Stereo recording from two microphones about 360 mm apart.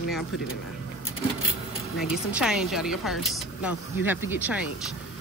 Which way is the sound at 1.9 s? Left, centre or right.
Centre.